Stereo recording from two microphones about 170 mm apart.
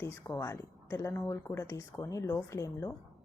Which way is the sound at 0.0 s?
15° left (ahead or behind).